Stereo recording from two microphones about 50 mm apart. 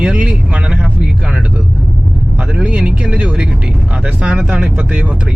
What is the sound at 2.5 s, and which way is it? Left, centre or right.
Speech, right.